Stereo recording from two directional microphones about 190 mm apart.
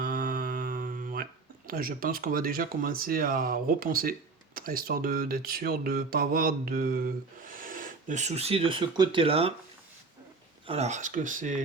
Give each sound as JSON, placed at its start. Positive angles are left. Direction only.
{"t": 0.0, "sound": "a sound", "side_deg": -50}
{"t": 4.5, "sound": "speech", "side_deg": -50}
{"t": 10.7, "sound": "speech", "side_deg": -35}